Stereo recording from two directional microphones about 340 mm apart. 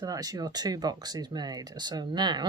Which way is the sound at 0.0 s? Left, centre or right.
Centre.